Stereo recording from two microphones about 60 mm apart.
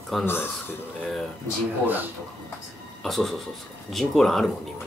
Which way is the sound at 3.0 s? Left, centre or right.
Centre.